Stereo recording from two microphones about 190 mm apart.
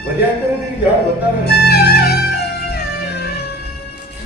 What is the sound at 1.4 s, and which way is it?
Music, 55° left (ahead or behind).